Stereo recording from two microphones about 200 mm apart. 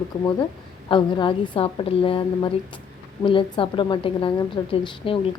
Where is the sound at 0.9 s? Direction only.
25° left (ahead or behind).